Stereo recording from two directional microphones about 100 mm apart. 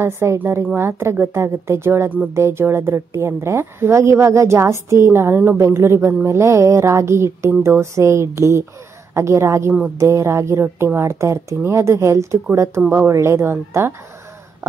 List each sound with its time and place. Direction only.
0.0 s a woman's voice: 25° right (ahead or behind)